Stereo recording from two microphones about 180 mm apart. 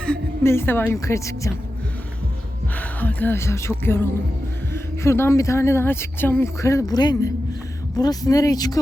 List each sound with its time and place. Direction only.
0.0 s a woman's voice: 10° left (ahead or behind)
2.7 s a woman's voice: 10° left (ahead or behind)